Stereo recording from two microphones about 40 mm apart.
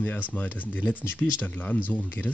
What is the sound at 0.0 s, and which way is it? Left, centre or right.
Speech, left.